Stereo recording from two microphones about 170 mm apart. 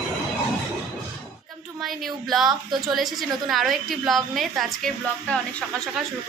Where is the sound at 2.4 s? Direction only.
25° right (ahead or behind).